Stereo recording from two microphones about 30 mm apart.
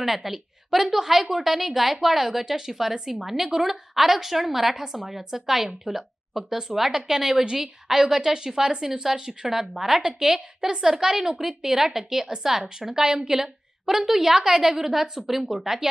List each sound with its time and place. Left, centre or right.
0.0 s a woman's voice: centre